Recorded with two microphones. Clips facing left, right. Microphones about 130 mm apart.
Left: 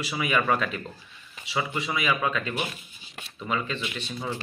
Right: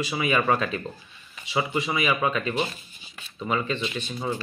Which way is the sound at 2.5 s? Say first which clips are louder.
Right 4 dB; 10° left (ahead or behind).